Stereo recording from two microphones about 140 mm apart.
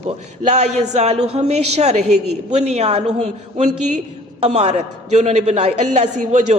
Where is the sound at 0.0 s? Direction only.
55° right (ahead or behind).